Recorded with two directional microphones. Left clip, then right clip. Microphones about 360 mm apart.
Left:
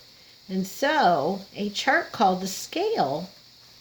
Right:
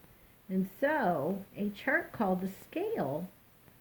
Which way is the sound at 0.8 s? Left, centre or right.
Left.